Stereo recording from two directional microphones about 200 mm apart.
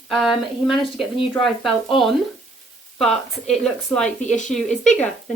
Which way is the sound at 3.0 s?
Centre (ahead or behind).